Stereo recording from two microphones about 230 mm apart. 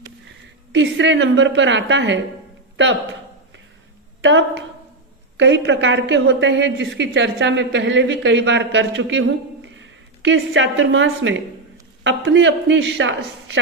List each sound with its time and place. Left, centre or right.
0.7 s a woman's voice: right
4.2 s a woman's voice: right